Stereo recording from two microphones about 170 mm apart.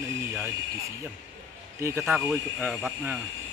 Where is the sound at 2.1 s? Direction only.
Centre (ahead or behind).